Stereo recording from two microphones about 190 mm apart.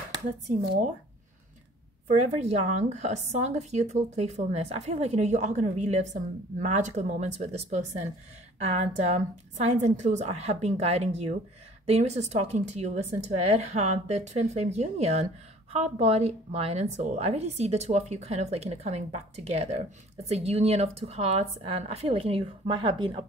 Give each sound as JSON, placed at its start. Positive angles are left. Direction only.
{"t": 0.5, "sound": "a woman's voice", "side_deg": -40}
{"t": 2.0, "sound": "a woman's voice", "side_deg": -40}